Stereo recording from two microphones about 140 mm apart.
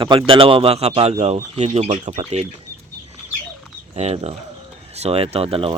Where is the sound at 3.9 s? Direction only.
50° right (ahead or behind).